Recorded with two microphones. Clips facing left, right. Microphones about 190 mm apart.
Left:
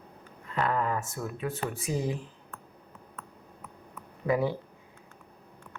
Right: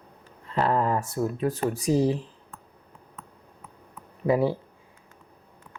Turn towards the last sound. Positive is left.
turn(degrees=-30)  # may be behind; listen again after turning